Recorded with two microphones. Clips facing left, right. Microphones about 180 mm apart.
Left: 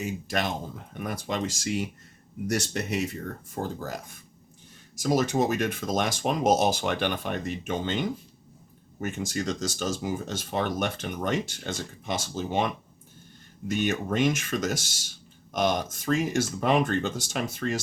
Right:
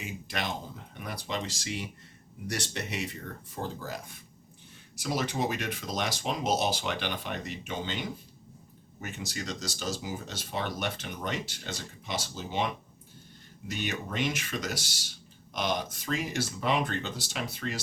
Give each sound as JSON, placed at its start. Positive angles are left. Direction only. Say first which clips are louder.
{"t": 0.0, "sound": "speech", "louder": "left 6 dB", "side_deg": 45}
{"t": 13.7, "sound": "speech", "louder": "left 8 dB", "side_deg": 50}